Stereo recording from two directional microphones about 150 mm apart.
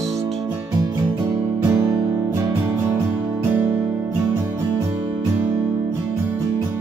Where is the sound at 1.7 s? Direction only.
20° right (ahead or behind).